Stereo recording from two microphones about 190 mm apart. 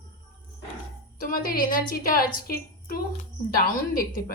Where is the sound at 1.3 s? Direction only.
50° left (ahead or behind).